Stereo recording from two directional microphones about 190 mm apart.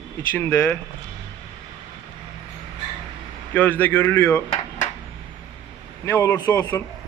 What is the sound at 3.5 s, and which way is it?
Speech, 10° left (ahead or behind).